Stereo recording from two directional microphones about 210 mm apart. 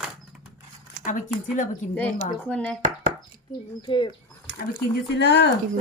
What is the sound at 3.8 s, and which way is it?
Speech, 20° left (ahead or behind).